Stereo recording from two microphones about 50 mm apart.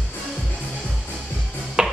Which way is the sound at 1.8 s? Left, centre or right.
Centre.